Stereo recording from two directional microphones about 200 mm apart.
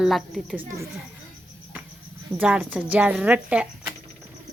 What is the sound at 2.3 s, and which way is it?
Speech, 5° right (ahead or behind).